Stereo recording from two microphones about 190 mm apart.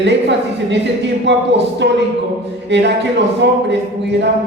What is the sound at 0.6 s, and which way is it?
Speech, 65° right (ahead or behind).